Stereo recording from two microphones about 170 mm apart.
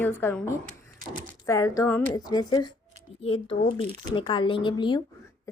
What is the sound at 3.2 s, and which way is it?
A woman's voice, 35° left (ahead or behind).